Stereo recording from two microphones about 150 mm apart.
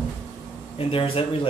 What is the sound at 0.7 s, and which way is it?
Speech, 40° left (ahead or behind).